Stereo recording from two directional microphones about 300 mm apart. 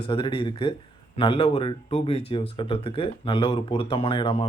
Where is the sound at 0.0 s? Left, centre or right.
Centre.